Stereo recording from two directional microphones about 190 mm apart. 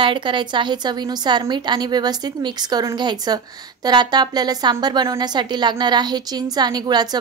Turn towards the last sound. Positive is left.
turn(degrees=-20)  # may be behind; listen again after turning